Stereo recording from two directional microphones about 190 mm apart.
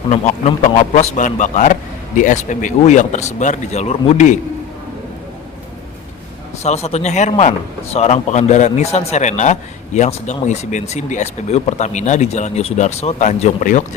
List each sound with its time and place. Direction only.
0.1 s a man's voice: 40° left (ahead or behind)
6.6 s a man's voice: 35° left (ahead or behind)